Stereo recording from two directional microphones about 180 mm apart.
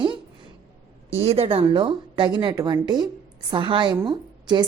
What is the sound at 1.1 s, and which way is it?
A woman's voice, 35° right (ahead or behind).